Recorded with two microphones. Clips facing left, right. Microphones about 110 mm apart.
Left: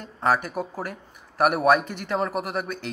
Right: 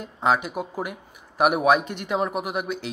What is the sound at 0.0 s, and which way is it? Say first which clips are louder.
Speech: right 1 dB; 10° right (ahead or behind).